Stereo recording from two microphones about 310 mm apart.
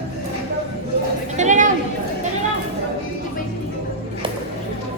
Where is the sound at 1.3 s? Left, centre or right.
Right.